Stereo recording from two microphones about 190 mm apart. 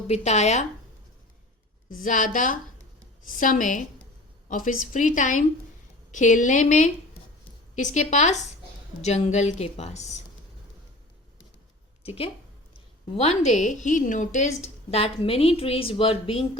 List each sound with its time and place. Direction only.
0.1 s a woman's voice: 35° left (ahead or behind)
2.0 s a woman's voice: 45° left (ahead or behind)
12.0 s a woman's voice: 30° left (ahead or behind)